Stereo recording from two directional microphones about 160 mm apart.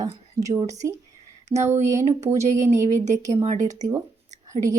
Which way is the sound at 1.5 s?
35° right (ahead or behind).